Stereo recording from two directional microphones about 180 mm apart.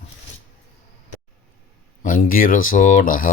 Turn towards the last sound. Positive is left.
turn(degrees=50)  # may be behind; listen again after turning